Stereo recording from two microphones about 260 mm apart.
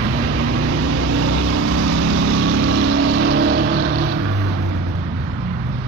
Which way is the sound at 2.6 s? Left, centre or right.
Right.